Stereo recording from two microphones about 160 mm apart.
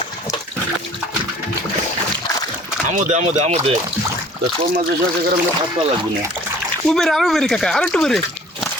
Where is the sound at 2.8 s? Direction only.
50° right (ahead or behind).